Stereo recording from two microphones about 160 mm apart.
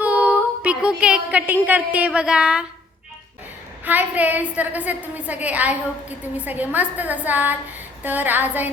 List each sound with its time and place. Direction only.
0.0 s speech: 10° right (ahead or behind)
3.8 s a woman's voice: 10° right (ahead or behind)